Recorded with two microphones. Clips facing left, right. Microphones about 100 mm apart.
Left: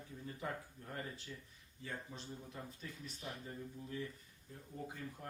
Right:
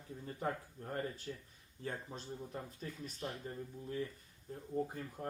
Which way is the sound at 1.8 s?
50° right (ahead or behind).